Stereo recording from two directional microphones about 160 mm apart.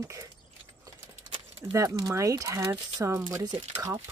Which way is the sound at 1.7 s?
20° right (ahead or behind).